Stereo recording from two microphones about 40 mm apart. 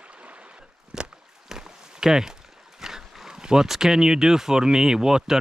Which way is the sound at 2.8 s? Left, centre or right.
Centre.